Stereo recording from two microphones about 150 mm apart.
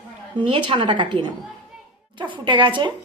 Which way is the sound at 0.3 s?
35° right (ahead or behind).